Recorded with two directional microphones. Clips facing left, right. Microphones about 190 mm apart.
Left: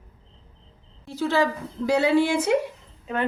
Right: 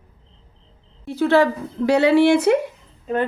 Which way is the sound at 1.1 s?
60° right (ahead or behind).